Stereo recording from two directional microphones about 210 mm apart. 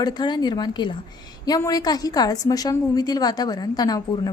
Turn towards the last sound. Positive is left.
turn(degrees=20)  # may be behind; listen again after turning